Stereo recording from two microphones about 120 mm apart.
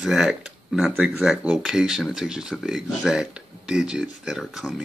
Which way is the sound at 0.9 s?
15° right (ahead or behind).